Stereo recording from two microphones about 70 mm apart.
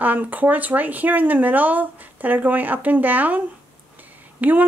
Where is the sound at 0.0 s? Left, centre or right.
Right.